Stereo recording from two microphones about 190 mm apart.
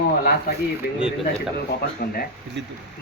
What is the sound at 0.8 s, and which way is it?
Speech, 55° left (ahead or behind).